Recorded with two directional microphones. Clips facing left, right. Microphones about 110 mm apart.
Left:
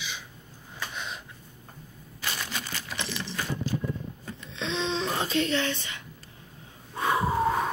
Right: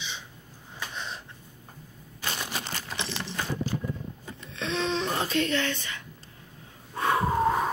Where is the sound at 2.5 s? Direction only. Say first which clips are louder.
Right 1 dB; 35° right (ahead or behind).